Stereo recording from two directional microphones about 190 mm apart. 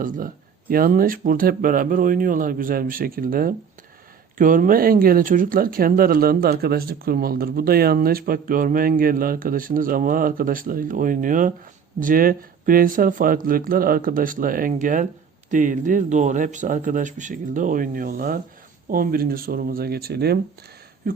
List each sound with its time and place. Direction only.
0.7 s speech: 50° right (ahead or behind)